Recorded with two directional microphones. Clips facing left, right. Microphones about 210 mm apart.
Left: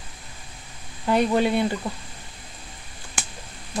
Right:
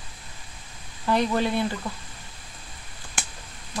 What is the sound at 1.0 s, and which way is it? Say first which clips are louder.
Speech: left 3 dB; 20° left (ahead or behind).